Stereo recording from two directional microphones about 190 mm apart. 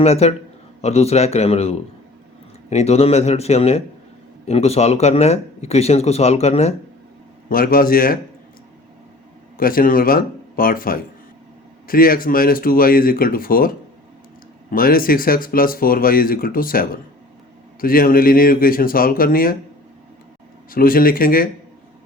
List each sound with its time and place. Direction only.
0.0 s speech: 35° left (ahead or behind)
7.5 s speech: 50° left (ahead or behind)
9.6 s speech: 50° left (ahead or behind)
20.7 s speech: 50° left (ahead or behind)